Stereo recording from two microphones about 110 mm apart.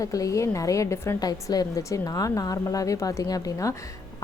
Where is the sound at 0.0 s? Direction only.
30° left (ahead or behind).